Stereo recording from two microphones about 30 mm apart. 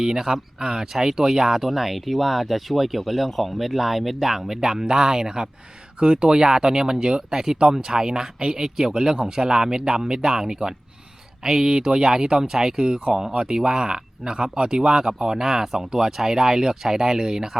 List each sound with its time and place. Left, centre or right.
0.0 s speech: centre
6.0 s speech: right; by 11.7 s centre
11.7 s speech: right